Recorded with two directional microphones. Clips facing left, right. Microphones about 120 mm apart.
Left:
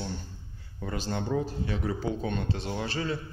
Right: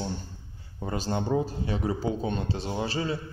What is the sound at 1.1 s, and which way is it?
Speech, 20° right (ahead or behind).